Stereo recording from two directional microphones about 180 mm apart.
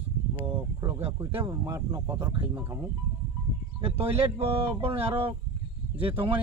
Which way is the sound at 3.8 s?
30° right (ahead or behind).